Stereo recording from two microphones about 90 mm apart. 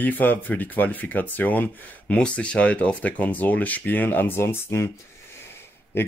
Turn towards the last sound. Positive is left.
turn(degrees=25)  # may be behind; listen again after turning